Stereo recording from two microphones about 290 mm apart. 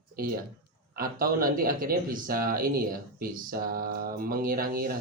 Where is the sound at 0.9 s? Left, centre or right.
Right.